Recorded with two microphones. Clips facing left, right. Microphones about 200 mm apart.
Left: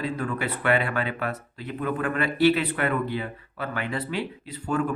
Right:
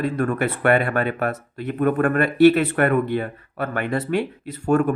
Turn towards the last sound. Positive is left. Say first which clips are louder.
# right 8 dB
turn(degrees=-50)  # may be behind; listen again after turning